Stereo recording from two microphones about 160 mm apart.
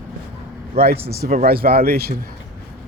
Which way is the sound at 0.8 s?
70° right (ahead or behind).